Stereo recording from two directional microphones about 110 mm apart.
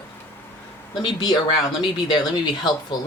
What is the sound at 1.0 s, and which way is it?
Speech, 40° left (ahead or behind).